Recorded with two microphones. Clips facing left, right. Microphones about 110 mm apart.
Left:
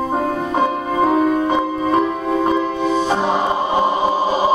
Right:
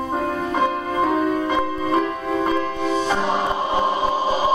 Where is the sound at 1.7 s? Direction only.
35° left (ahead or behind).